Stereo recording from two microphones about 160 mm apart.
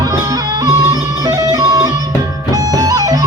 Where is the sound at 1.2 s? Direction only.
20° right (ahead or behind).